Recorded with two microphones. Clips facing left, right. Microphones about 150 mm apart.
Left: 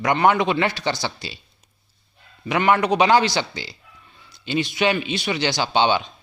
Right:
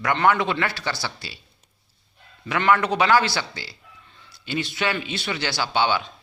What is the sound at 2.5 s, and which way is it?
A man's voice, 20° left (ahead or behind).